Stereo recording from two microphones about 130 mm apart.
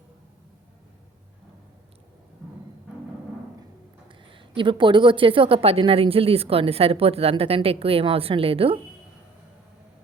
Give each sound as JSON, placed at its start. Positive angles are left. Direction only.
{"t": 4.1, "sound": "speech", "side_deg": -40}